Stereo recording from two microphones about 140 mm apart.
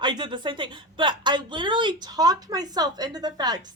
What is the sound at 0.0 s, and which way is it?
A woman's voice, 35° right (ahead or behind).